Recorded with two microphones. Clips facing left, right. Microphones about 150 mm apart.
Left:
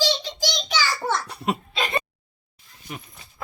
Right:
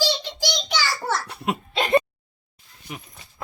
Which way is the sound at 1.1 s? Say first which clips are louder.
Even; 5° right (ahead or behind).